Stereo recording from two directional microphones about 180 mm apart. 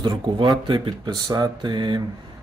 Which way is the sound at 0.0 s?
25° right (ahead or behind).